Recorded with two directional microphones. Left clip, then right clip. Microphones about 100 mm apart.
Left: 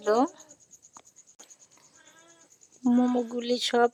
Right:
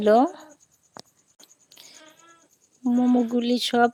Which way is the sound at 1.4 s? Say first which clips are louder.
Right 6 dB; 45° right (ahead or behind).